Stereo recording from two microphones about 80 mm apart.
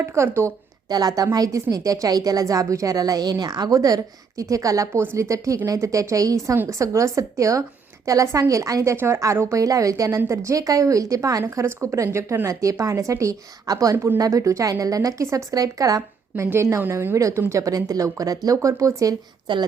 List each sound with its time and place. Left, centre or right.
0.0 s speech: right
0.9 s a woman's voice: right
3.8 s a woman's voice: right
13.9 s speech: right
14.2 s a woman's voice: right
16.3 s a woman's voice: right
19.5 s speech: right